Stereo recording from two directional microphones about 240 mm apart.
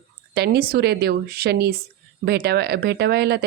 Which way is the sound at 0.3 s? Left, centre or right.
Right.